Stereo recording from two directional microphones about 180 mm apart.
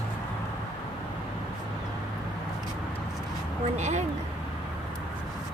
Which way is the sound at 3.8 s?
40° right (ahead or behind).